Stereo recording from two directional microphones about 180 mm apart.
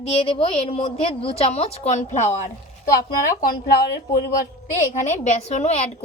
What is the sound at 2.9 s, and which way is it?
Speech, 50° left (ahead or behind).